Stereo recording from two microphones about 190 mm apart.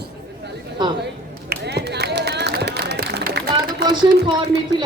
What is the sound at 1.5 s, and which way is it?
Clapping, 60° right (ahead or behind).